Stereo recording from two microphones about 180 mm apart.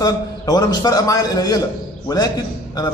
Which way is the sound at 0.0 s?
20° left (ahead or behind).